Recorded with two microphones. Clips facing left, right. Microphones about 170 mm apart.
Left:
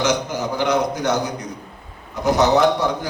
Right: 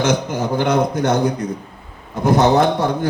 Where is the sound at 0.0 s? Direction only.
55° right (ahead or behind).